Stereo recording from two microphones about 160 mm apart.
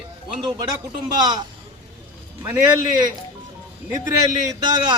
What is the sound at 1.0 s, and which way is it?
Speech, 25° right (ahead or behind).